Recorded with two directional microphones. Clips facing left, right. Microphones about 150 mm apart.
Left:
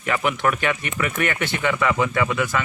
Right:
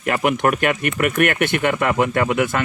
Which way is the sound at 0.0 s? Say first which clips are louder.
Right 4 dB; 50° right (ahead or behind).